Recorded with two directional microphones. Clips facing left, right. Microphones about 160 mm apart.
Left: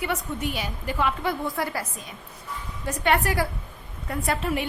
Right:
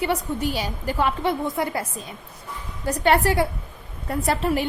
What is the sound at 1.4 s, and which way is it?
Speech, 20° right (ahead or behind).